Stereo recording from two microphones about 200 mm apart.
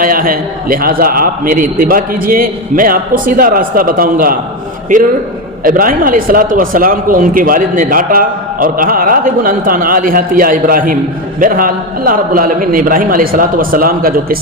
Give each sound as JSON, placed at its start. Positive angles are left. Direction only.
{"t": 0.0, "sound": "speech", "side_deg": -45}
{"t": 5.6, "sound": "speech", "side_deg": -45}